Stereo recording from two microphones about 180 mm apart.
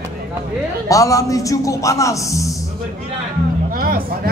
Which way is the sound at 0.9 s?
20° left (ahead or behind).